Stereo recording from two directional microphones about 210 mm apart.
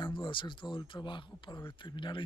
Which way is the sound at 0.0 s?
25° left (ahead or behind).